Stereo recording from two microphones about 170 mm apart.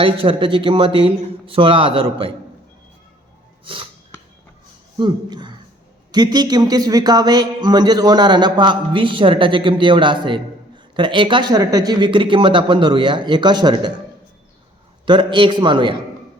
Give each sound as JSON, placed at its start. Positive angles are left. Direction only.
{"t": 0.0, "sound": "a man's voice", "side_deg": -30}
{"t": 3.6, "sound": "sneeze", "side_deg": -30}
{"t": 4.9, "sound": "speech", "side_deg": -25}
{"t": 15.0, "sound": "speech", "side_deg": -30}